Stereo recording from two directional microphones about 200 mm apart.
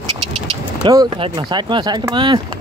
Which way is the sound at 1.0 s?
25° right (ahead or behind).